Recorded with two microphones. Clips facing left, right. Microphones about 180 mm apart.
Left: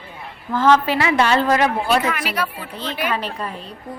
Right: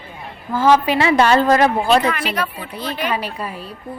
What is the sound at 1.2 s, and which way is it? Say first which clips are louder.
Speech: right 3 dB; 40° right (ahead or behind).